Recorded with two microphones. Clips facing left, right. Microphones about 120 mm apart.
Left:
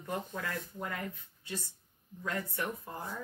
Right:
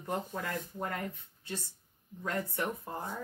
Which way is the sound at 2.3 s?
25° right (ahead or behind).